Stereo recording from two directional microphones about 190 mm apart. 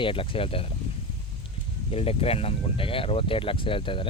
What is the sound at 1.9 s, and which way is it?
Speech, 30° left (ahead or behind).